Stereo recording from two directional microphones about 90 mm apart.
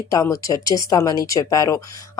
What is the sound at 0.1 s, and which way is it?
Speech, 40° left (ahead or behind).